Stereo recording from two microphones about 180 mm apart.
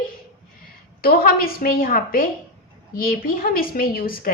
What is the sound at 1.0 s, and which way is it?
A woman's voice, 55° left (ahead or behind).